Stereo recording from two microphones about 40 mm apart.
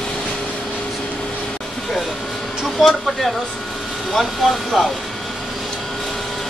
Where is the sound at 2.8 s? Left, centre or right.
Centre.